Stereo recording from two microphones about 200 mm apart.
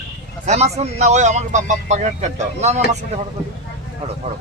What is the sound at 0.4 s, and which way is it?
Speech, 35° right (ahead or behind).